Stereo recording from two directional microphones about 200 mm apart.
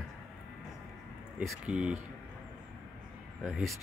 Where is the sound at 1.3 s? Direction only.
5° right (ahead or behind).